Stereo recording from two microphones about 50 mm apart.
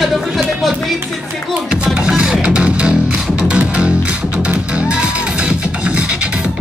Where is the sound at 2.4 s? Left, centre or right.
Right.